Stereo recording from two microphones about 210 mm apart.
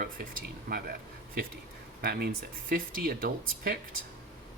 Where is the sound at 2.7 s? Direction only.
45° right (ahead or behind).